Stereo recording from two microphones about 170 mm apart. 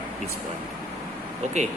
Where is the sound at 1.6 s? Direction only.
40° right (ahead or behind).